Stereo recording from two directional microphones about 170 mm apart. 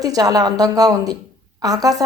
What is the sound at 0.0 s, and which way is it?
A woman's voice, 20° right (ahead or behind).